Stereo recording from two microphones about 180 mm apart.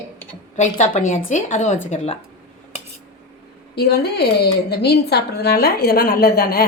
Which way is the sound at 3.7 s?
60° left (ahead or behind).